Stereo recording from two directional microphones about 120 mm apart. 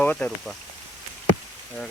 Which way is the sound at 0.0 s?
10° left (ahead or behind).